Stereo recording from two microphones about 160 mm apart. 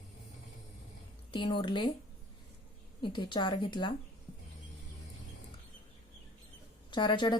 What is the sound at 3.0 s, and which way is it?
Speech, 30° left (ahead or behind).